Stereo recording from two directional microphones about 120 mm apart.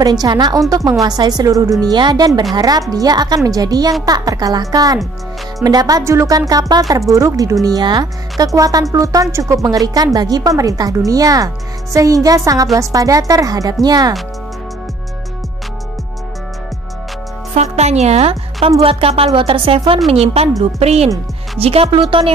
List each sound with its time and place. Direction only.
0.0 s a woman's voice: 35° right (ahead or behind)
17.6 s a woman's voice: 65° right (ahead or behind); by 22.0 s 50° right (ahead or behind)